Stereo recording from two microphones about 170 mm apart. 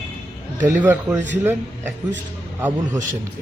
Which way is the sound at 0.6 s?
10° right (ahead or behind).